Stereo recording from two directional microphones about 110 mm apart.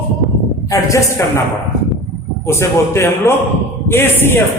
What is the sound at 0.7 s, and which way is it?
Speech, 30° left (ahead or behind).